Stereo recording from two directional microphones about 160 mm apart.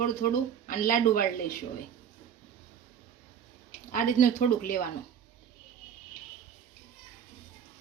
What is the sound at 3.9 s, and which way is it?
Speech, 60° left (ahead or behind).